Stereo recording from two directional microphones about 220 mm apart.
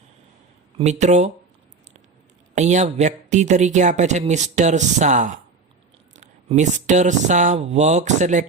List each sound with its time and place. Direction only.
0.8 s speech: 30° right (ahead or behind)
2.6 s speech: 30° right (ahead or behind)